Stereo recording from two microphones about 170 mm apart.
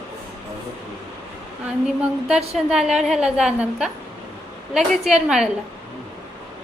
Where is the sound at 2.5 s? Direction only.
Centre (ahead or behind).